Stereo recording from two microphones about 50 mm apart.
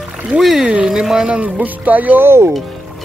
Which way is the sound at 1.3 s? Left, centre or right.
Right.